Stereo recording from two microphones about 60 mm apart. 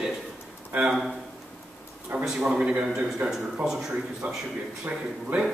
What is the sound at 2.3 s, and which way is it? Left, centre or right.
Speech, centre.